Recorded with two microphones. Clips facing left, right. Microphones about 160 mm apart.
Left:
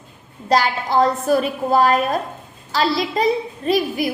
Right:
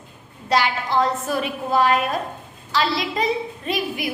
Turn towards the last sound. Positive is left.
turn(degrees=40)  # may be behind; listen again after turning